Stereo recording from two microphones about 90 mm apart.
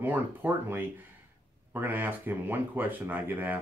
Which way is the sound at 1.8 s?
20° right (ahead or behind).